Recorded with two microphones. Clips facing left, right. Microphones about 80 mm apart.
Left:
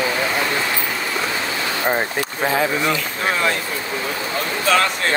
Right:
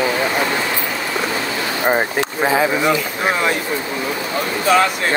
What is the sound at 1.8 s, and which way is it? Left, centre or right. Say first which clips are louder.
Speech: right 5 dB; centre.